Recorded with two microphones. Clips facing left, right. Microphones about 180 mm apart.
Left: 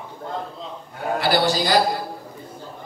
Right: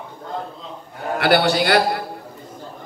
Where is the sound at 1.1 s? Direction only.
65° right (ahead or behind).